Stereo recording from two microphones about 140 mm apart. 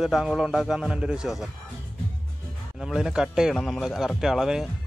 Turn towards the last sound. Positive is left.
turn(degrees=0)  # may be behind; listen again after turning